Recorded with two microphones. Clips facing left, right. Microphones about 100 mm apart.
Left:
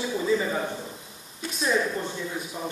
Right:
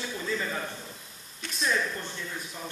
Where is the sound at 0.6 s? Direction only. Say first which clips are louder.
Left 7 dB; 25° left (ahead or behind).